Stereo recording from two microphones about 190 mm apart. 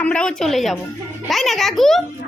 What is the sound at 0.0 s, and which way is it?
A woman's voice, 5° left (ahead or behind).